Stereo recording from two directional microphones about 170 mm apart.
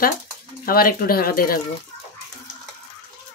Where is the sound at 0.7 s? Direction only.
60° left (ahead or behind).